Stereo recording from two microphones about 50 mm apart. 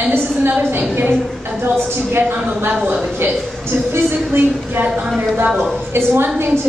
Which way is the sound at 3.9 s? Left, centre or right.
Right.